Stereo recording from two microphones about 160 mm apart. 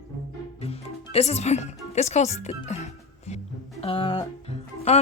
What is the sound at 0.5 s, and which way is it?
Music, 40° left (ahead or behind).